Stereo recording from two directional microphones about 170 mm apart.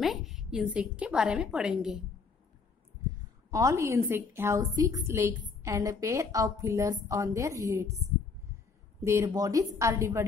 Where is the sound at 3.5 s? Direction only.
20° right (ahead or behind).